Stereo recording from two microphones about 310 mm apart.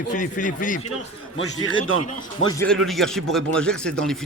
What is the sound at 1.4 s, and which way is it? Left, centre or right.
Speech, left.